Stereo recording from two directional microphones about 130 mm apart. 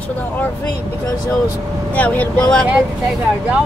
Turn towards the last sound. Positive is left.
turn(degrees=-10)  # may be behind; listen again after turning